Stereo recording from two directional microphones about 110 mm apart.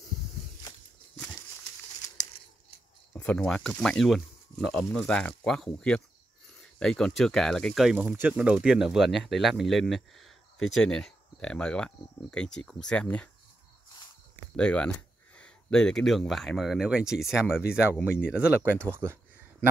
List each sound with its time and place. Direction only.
3.3 s speech: 10° left (ahead or behind)
8.0 s speech: 15° right (ahead or behind); by 13.3 s 10° left (ahead or behind)
14.6 s speech: 10° left (ahead or behind); by 19.1 s 20° right (ahead or behind)